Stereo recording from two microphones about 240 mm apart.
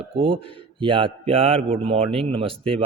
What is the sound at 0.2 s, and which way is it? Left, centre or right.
A man's voice, right.